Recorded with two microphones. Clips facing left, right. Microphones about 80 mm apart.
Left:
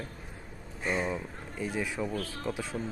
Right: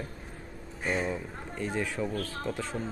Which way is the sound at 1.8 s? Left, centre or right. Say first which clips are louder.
Right 1 dB; centre.